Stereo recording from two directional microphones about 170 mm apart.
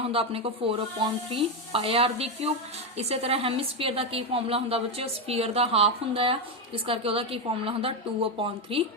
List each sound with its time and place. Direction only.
0.1 s a woman's voice: 35° right (ahead or behind)